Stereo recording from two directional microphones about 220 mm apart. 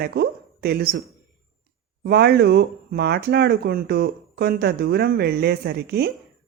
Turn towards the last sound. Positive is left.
turn(degrees=-45)  # may be behind; listen again after turning